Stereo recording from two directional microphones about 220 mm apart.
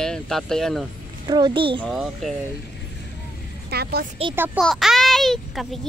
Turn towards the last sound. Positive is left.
turn(degrees=0)  # may be behind; listen again after turning